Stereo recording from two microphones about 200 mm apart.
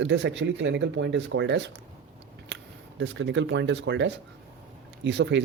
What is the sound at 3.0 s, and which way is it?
Speech, 65° right (ahead or behind).